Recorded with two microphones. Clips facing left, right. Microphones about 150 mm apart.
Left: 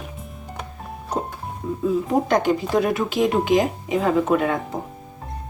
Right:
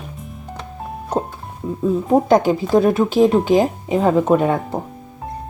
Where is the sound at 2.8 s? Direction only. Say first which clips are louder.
Right 6 dB; 30° right (ahead or behind).